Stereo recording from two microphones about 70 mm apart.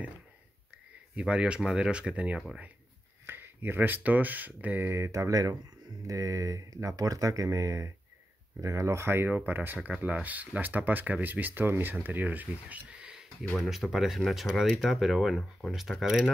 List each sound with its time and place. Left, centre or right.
1.1 s speech: centre
3.3 s speech: right
4.7 s speech: right
8.9 s speech: right
13.6 s speech: centre